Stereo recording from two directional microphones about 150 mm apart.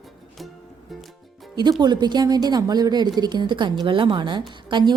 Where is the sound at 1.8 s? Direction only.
30° right (ahead or behind).